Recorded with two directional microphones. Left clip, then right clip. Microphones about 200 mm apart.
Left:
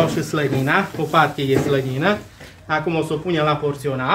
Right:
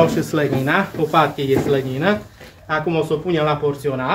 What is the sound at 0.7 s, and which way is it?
Speech, 5° left (ahead or behind).